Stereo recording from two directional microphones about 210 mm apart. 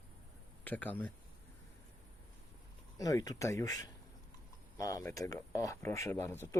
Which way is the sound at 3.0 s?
15° left (ahead or behind).